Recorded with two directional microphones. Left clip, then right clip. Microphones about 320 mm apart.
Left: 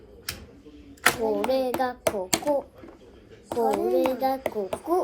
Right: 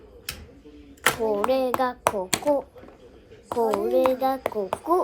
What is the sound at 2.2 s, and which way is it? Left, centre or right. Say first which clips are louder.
Speech: right 1 dB; right.